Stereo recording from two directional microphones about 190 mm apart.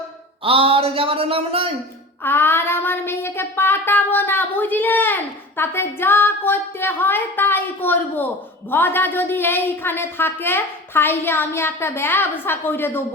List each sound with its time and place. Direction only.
0.4 s speech: 30° right (ahead or behind)
2.2 s child singing: 10° left (ahead or behind)